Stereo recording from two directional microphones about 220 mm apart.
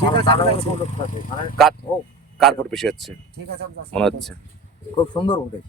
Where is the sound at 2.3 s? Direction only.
Centre (ahead or behind).